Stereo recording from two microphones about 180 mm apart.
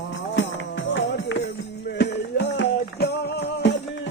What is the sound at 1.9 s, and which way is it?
Music, 70° left (ahead or behind).